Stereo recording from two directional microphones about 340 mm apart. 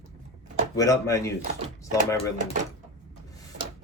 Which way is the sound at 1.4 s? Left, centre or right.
Right.